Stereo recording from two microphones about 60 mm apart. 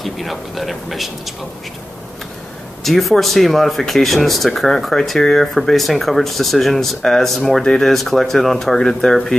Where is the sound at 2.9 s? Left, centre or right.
Centre.